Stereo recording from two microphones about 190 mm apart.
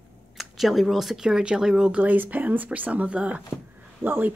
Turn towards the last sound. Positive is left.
turn(degrees=-10)  # may be behind; listen again after turning